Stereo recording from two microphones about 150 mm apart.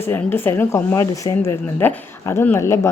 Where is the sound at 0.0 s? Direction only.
15° left (ahead or behind).